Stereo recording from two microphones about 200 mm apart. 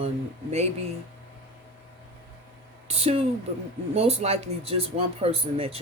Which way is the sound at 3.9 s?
30° right (ahead or behind).